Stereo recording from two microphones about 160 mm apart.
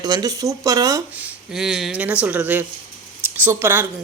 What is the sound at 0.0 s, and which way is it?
Speech, 25° right (ahead or behind).